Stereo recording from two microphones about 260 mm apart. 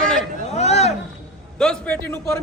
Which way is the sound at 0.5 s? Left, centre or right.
Left.